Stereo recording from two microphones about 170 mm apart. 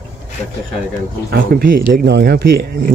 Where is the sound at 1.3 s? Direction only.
60° right (ahead or behind).